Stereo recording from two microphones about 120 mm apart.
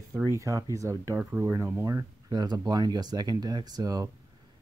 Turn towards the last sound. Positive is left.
turn(degrees=-30)  # may be behind; listen again after turning